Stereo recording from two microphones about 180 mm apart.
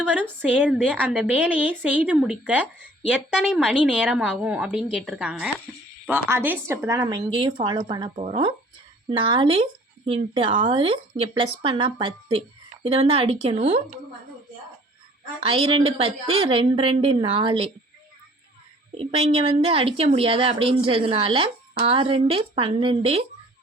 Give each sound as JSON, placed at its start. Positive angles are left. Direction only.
{"t": 0.0, "sound": "a woman's voice", "side_deg": -10}
{"t": 15.4, "sound": "a woman's voice", "side_deg": -30}
{"t": 18.9, "sound": "a woman's voice", "side_deg": -35}